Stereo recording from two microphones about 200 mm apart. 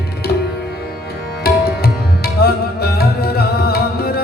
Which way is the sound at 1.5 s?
50° left (ahead or behind).